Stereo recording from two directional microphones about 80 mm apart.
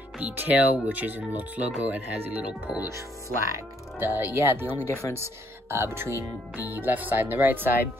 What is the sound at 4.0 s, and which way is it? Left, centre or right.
Speech, right.